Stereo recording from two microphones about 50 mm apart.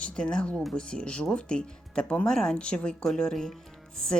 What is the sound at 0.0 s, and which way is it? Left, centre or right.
Speech, centre.